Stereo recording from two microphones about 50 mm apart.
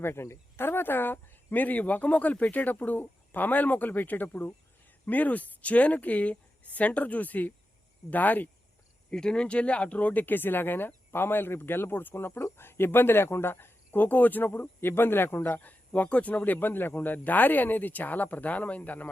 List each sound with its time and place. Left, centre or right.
0.0 s speech: left
9.0 s speech: centre